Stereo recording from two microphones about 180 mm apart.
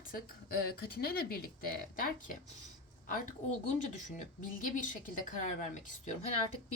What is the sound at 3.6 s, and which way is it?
A woman's voice, 40° left (ahead or behind).